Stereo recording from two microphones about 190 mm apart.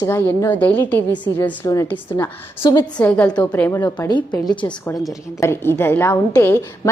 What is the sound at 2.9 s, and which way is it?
A woman's voice, 5° left (ahead or behind).